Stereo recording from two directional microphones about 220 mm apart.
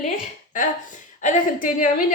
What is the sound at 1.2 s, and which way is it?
Speech, 35° left (ahead or behind).